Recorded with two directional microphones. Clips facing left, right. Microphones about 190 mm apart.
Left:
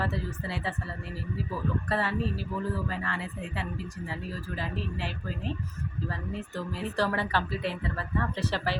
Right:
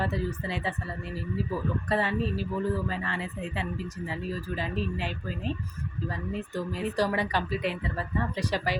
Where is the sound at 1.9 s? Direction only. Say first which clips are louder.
Right 3 dB; 20° right (ahead or behind).